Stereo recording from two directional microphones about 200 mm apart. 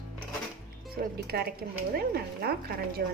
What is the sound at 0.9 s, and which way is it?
Speech, 50° right (ahead or behind).